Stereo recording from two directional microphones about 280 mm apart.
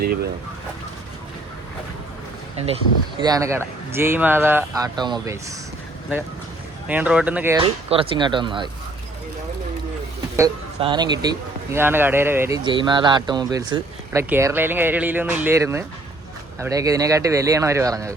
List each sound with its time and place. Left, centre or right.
3.2 s speech: centre
6.8 s speech: centre
7.6 s speech: centre
10.3 s speech: centre